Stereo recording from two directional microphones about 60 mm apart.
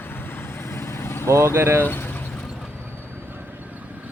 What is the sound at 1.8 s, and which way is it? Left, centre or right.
Speech, left.